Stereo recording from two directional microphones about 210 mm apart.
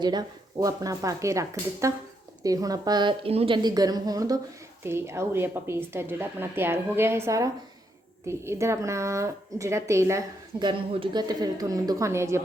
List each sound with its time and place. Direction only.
0.0 s speech: 20° right (ahead or behind)